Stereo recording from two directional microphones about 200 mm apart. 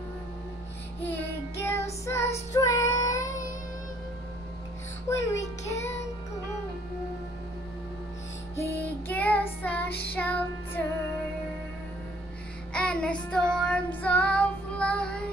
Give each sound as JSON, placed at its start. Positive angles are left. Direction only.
{"t": 1.6, "sound": "child singing", "side_deg": 10}
{"t": 2.1, "sound": "speech", "side_deg": 15}
{"t": 2.5, "sound": "child singing", "side_deg": 15}
{"t": 5.0, "sound": "speech", "side_deg": 15}
{"t": 8.7, "sound": "child singing", "side_deg": 10}
{"t": 10.1, "sound": "music", "side_deg": 10}
{"t": 12.7, "sound": "child singing", "side_deg": 5}